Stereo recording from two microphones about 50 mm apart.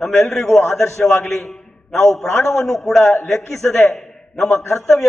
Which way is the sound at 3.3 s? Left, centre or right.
Left.